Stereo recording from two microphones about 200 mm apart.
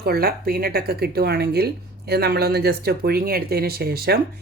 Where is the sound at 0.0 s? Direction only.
50° right (ahead or behind).